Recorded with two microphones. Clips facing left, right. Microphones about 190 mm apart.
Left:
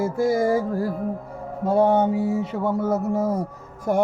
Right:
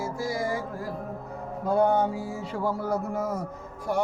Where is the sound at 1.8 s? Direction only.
25° left (ahead or behind).